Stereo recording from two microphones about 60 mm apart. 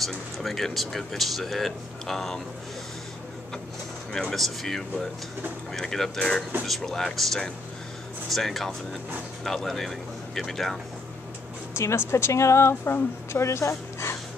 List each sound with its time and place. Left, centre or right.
0.0 s speech: centre
4.1 s speech: centre
11.7 s speech: left